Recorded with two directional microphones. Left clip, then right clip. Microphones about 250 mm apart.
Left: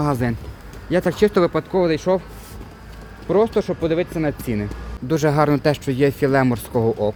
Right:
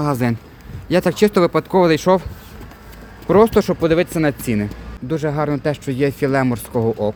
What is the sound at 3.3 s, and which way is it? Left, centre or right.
Speech, right.